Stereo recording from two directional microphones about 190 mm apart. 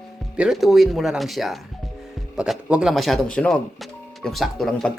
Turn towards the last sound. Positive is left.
turn(degrees=0)  # may be behind; listen again after turning